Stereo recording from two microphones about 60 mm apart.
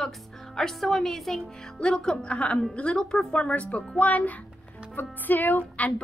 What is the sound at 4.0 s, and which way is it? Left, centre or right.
A woman's voice, left.